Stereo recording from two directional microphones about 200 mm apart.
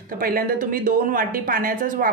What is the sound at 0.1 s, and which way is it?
A woman's voice, 45° right (ahead or behind).